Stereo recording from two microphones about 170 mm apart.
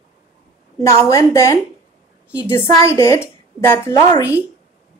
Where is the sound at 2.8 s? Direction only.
15° left (ahead or behind).